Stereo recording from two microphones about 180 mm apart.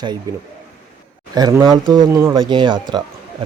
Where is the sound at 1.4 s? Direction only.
20° right (ahead or behind).